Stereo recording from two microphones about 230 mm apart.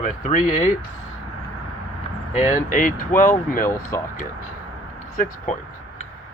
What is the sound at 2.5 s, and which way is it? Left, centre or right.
Speech, left.